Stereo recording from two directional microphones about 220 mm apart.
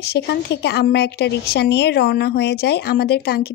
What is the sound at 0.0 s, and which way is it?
A woman's voice, 45° left (ahead or behind).